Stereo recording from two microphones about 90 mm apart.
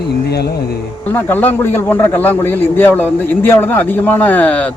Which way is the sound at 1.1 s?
25° left (ahead or behind).